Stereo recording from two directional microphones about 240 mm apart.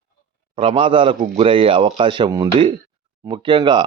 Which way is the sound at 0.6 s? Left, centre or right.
Right.